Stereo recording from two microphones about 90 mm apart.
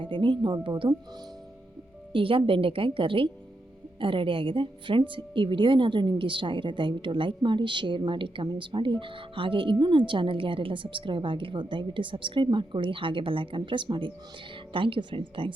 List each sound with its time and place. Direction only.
0.0 s a woman's voice: 70° right (ahead or behind)
2.1 s a woman's voice: 75° right (ahead or behind); by 14.1 s 60° right (ahead or behind)
14.7 s a woman's voice: 75° right (ahead or behind)